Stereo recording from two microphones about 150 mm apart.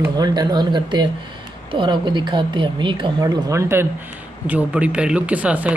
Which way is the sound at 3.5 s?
20° right (ahead or behind).